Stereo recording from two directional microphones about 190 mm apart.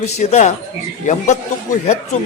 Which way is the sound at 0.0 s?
35° left (ahead or behind).